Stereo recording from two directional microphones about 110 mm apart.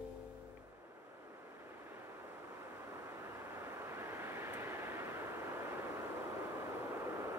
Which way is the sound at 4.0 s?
20° right (ahead or behind).